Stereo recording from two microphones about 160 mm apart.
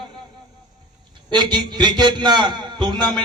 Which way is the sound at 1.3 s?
30° right (ahead or behind).